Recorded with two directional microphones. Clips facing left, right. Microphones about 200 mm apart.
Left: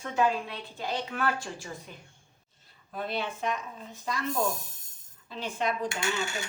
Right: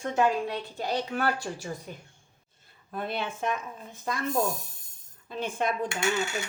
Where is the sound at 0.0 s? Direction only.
45° right (ahead or behind).